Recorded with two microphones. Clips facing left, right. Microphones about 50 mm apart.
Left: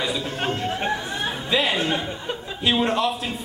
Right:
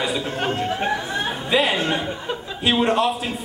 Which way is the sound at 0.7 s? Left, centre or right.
Centre.